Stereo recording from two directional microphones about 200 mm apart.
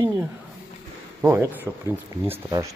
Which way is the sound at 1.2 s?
10° right (ahead or behind).